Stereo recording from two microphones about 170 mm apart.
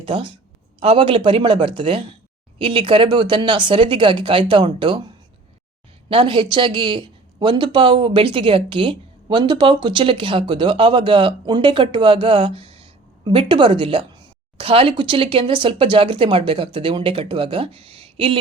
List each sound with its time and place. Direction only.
0.0 s a woman's voice: 30° right (ahead or behind)